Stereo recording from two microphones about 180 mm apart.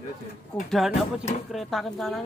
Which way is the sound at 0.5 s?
5° left (ahead or behind).